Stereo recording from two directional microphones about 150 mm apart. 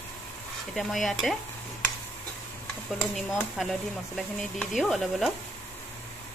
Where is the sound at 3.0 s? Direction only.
Centre (ahead or behind).